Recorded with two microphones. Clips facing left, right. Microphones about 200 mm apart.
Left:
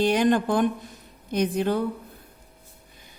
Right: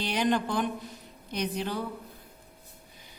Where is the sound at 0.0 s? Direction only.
50° left (ahead or behind).